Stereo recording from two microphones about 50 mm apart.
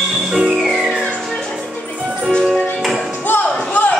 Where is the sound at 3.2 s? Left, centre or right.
Left.